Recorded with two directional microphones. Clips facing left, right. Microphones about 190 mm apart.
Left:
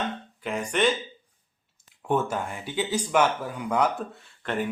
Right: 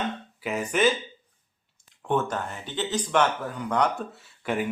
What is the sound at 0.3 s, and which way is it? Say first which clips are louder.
Speech: right 1 dB; 5° right (ahead or behind).